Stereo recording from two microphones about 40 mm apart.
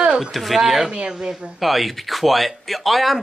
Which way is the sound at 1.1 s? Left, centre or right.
Centre.